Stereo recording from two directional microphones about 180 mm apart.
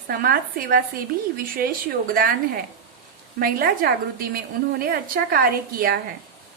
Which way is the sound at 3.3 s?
55° right (ahead or behind).